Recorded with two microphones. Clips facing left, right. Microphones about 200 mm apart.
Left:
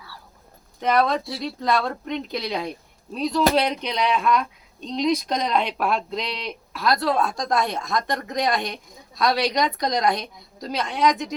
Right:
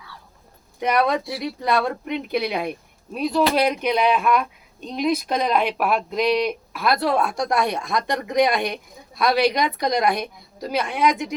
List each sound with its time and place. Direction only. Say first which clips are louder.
0.8 s speech: even; 10° right (ahead or behind)
7.3 s a woman's voice: right 1 dB; 65° right (ahead or behind)
7.7 s speech: right 2 dB; 10° right (ahead or behind)
10.2 s a woman's voice: right 5 dB; 55° right (ahead or behind)
10.8 s speech: right 1 dB; 10° right (ahead or behind)